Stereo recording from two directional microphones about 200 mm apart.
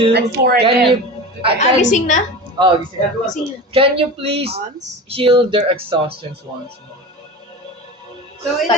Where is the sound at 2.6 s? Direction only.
20° right (ahead or behind).